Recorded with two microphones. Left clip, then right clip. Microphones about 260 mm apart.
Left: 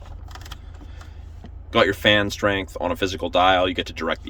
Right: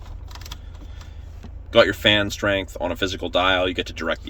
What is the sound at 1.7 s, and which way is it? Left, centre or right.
Speech, centre.